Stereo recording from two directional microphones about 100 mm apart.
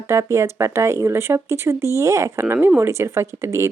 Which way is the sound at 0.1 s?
30° right (ahead or behind).